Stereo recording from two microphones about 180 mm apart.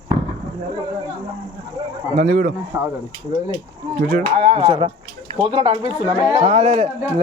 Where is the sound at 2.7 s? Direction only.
10° right (ahead or behind).